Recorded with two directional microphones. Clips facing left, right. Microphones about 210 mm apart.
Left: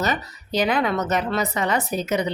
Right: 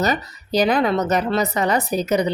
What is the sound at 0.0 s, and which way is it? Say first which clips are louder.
A woman's voice: right 3 dB; 40° right (ahead or behind).